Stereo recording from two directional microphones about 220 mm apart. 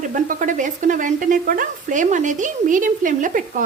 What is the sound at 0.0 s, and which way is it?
Speech, 35° right (ahead or behind).